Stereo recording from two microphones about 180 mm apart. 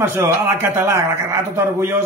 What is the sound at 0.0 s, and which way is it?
A man's voice, 15° right (ahead or behind).